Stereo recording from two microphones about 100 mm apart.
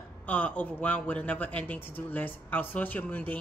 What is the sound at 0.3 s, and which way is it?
Speech, 15° left (ahead or behind).